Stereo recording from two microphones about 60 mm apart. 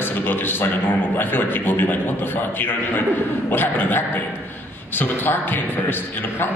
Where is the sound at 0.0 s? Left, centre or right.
Left.